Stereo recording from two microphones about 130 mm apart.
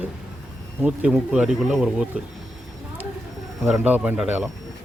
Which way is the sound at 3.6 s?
10° right (ahead or behind).